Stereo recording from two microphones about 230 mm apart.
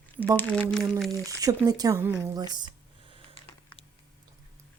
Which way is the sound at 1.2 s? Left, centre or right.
Centre.